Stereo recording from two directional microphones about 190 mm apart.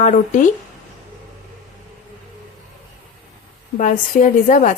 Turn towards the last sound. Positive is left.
turn(degrees=40)  # may be behind; listen again after turning